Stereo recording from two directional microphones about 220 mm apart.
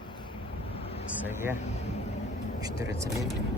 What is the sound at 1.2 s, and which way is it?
Speech, 10° right (ahead or behind).